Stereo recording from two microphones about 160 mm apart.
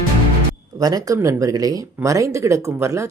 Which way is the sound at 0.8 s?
25° right (ahead or behind).